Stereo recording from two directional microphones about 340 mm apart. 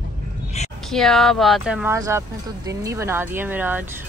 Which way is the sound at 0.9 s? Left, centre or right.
Centre.